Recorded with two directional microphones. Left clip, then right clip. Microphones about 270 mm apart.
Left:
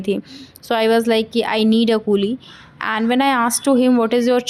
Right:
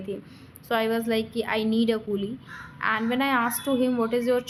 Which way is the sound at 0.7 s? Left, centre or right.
Left.